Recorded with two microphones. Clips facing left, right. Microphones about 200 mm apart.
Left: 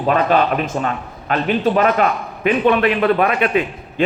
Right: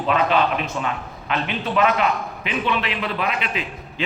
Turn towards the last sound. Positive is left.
turn(degrees=55)  # may be behind; listen again after turning